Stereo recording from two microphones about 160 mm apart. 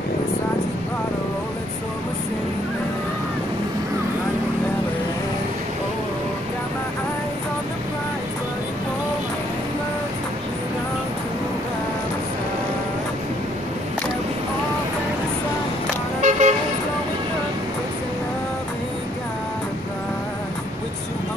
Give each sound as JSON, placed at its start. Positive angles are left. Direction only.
{"t": 16.2, "sound": "toot", "side_deg": -45}